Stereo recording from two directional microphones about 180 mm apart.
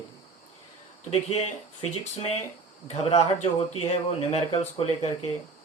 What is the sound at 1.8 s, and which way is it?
Speech, 35° left (ahead or behind).